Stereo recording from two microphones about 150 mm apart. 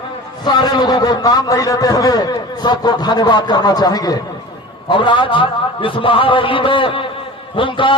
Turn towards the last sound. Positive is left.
turn(degrees=35)  # may be behind; listen again after turning